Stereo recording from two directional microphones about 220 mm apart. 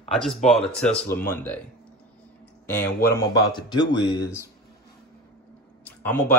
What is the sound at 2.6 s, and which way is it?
Speech, 10° left (ahead or behind).